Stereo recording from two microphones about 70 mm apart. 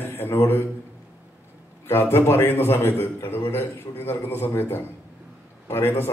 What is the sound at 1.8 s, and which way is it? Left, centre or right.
A man's voice, left.